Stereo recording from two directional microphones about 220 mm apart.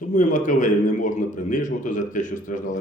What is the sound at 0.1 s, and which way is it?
A man's voice, 35° left (ahead or behind).